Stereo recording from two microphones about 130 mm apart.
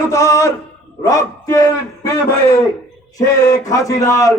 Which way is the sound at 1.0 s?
25° left (ahead or behind).